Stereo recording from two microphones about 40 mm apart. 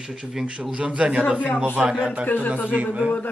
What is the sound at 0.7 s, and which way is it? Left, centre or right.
A man's voice, right.